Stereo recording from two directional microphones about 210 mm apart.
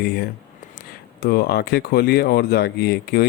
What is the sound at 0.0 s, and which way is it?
Speech, 50° left (ahead or behind).